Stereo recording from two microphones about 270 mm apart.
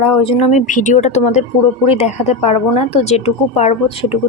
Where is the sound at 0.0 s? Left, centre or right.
Left.